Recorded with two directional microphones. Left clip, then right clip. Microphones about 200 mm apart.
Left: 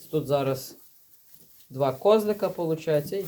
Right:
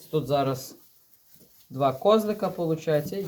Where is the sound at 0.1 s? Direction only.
5° left (ahead or behind).